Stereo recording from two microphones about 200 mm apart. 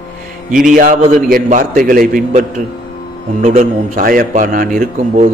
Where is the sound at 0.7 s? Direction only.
45° right (ahead or behind).